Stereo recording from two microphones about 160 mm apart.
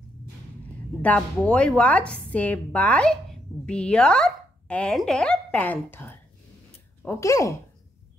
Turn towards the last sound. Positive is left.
turn(degrees=20)  # may be behind; listen again after turning